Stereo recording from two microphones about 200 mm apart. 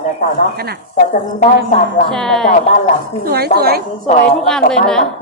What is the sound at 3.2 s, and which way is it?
Speech, 55° right (ahead or behind).